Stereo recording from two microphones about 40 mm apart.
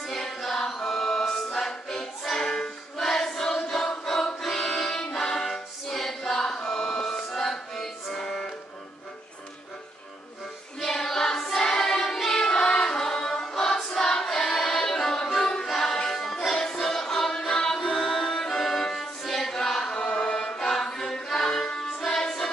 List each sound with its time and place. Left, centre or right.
0.0 s choir: centre
1.7 s music: centre
4.0 s choir: centre
4.4 s music: centre
7.1 s music: centre
10.8 s child singing: centre
11.5 s choir: centre
13.9 s music: centre
15.6 s music: centre